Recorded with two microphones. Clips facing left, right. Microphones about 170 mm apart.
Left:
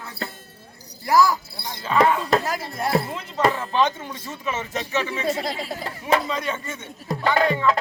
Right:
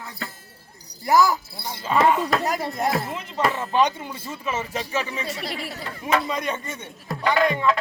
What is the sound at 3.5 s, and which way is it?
Speech, 5° right (ahead or behind).